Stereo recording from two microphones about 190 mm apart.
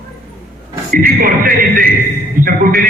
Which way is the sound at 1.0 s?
50° right (ahead or behind).